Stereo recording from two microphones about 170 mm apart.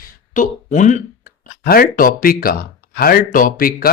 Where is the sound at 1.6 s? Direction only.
60° left (ahead or behind).